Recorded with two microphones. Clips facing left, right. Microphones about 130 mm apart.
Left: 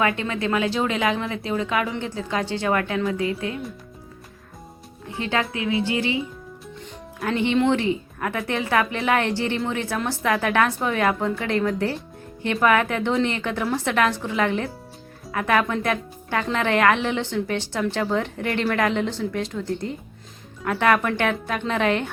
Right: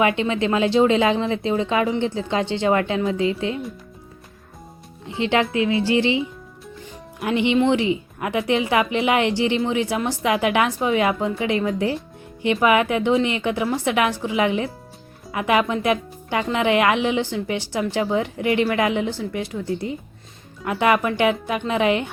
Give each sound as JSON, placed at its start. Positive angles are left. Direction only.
{"t": 0.0, "sound": "speech", "side_deg": -20}
{"t": 5.0, "sound": "speech", "side_deg": -25}